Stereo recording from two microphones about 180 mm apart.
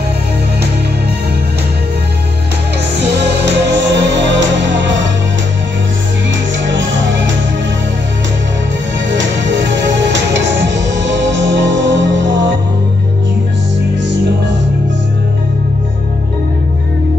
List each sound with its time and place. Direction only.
3.4 s music: 75° right (ahead or behind)
6.6 s music: 90° right
10.3 s music: 80° right